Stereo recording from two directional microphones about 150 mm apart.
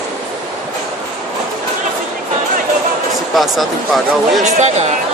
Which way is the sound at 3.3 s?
Centre (ahead or behind).